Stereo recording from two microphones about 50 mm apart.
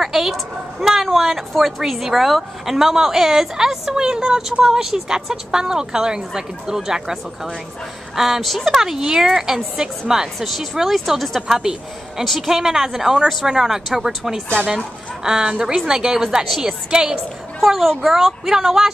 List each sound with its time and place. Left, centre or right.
0.0 s a woman's voice: centre
17.6 s speech: centre